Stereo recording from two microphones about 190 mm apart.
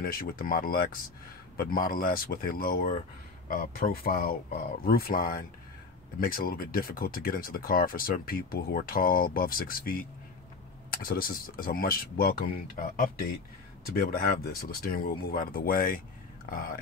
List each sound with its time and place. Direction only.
0.0 s speech: 50° left (ahead or behind)